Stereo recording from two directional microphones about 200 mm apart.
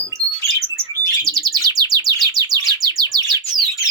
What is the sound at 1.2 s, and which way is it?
Bird, 15° right (ahead or behind).